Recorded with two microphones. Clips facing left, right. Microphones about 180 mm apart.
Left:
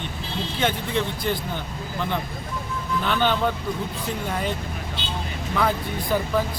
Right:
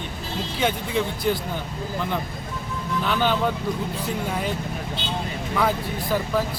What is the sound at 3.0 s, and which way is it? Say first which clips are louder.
Speech: even; 5° right (ahead or behind).